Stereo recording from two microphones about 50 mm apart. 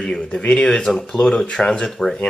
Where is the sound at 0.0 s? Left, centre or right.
Centre.